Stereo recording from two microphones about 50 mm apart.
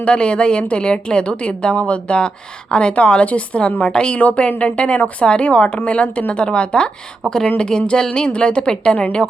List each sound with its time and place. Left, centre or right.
0.0 s a woman's voice: centre
3.9 s a woman's voice: centre